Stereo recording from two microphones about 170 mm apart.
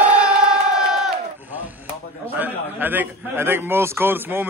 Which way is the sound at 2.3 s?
10° right (ahead or behind).